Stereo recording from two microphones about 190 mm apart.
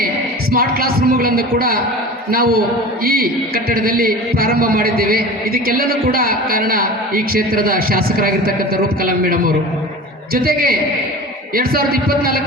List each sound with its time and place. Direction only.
0.5 s a man's voice: 50° right (ahead or behind)